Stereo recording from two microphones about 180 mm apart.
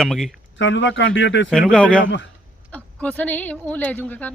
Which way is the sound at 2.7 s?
5° left (ahead or behind).